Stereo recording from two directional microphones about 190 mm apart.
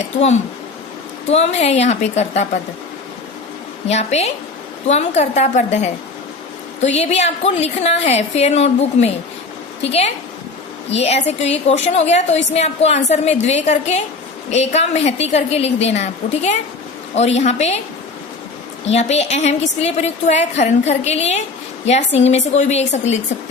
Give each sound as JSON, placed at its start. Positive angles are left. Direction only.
{"t": 1.3, "sound": "a woman's voice", "side_deg": 35}
{"t": 3.8, "sound": "a woman's voice", "side_deg": 35}
{"t": 18.9, "sound": "a woman's voice", "side_deg": 35}